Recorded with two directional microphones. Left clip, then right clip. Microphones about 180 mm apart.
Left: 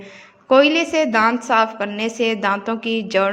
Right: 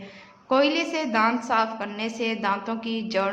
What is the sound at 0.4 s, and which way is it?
A woman's voice, 30° left (ahead or behind).